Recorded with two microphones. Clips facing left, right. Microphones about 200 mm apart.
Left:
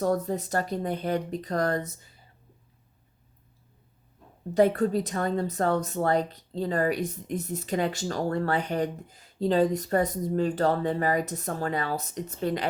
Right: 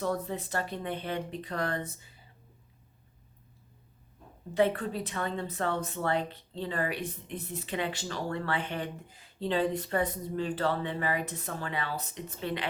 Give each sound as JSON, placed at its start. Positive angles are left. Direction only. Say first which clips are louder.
{"t": 0.0, "sound": "a woman's voice", "louder": "left 6 dB", "side_deg": 40}
{"t": 4.5, "sound": "a woman's voice", "louder": "left 6 dB", "side_deg": 40}